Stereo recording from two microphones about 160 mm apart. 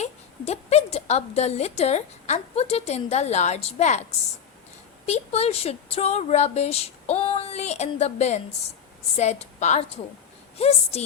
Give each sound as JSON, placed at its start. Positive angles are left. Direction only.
{"t": 0.0, "sound": "a woman's voice", "side_deg": 40}
{"t": 5.0, "sound": "speech", "side_deg": 40}